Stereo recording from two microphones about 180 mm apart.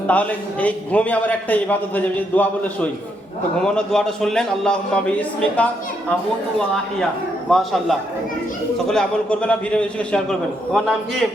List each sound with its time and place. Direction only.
0.1 s a man's voice: 10° left (ahead or behind)
7.5 s a man's voice: centre (ahead or behind)